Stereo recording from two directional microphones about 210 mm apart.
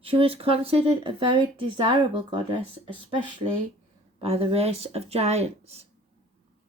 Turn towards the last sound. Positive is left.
turn(degrees=-30)  # may be behind; listen again after turning